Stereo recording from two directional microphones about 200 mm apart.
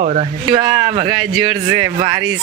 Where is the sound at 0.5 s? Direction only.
20° right (ahead or behind).